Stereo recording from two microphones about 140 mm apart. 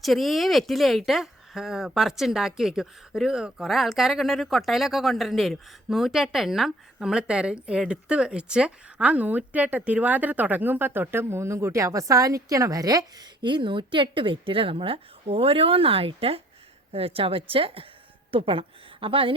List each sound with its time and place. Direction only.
0.0 s a woman's voice: centre (ahead or behind); by 19.3 s 40° right (ahead or behind)